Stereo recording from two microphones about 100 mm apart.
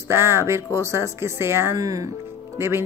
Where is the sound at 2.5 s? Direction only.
25° right (ahead or behind).